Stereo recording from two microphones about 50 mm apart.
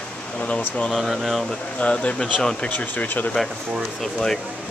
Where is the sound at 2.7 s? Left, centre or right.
Left.